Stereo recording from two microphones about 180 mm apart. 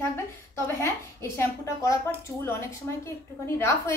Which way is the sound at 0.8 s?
15° left (ahead or behind).